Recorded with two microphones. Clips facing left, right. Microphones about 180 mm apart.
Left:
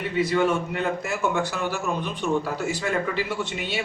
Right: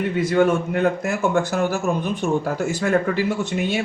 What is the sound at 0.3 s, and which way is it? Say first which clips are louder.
A man's voice: right 7 dB; 50° right (ahead or behind).